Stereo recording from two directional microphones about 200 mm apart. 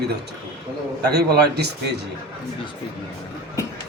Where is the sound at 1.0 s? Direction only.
50° right (ahead or behind).